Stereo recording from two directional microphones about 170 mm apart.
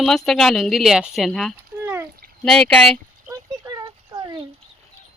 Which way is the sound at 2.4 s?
5° left (ahead or behind).